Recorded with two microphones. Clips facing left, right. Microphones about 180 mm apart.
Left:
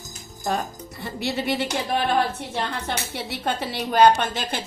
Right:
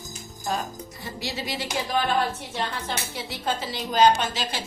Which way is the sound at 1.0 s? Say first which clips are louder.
Left 6 dB; 60° left (ahead or behind).